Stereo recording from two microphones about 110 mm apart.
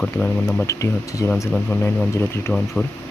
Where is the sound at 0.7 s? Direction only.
30° left (ahead or behind).